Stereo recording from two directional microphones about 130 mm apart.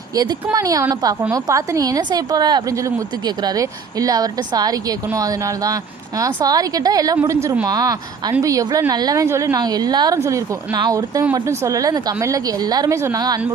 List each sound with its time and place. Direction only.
0.1 s a woman's voice: 30° right (ahead or behind)